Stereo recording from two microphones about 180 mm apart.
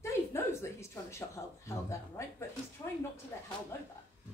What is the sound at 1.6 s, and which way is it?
Speech, 15° left (ahead or behind).